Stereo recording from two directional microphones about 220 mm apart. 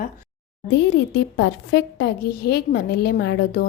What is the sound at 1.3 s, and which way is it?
A woman's voice, 55° left (ahead or behind).